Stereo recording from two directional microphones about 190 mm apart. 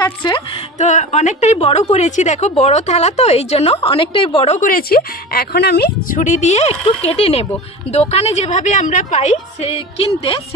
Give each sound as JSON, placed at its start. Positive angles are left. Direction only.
{"t": 0.0, "sound": "speech", "side_deg": 25}
{"t": 0.7, "sound": "a woman's voice", "side_deg": 40}
{"t": 4.6, "sound": "a woman's voice", "side_deg": 45}